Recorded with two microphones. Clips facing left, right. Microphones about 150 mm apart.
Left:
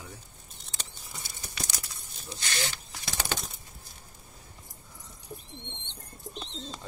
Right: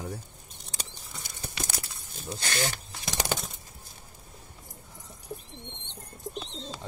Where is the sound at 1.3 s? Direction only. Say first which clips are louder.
Right 4 dB; 55° right (ahead or behind).